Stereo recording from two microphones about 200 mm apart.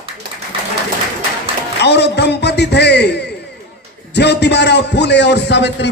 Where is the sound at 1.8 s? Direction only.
55° left (ahead or behind).